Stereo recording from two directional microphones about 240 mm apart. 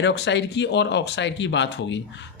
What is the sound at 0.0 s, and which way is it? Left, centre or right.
Speech, left.